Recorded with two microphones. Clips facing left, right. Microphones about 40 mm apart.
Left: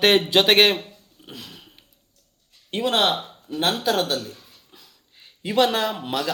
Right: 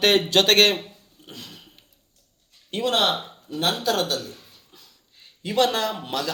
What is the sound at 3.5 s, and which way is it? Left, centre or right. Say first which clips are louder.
Speech: left 1 dB; centre.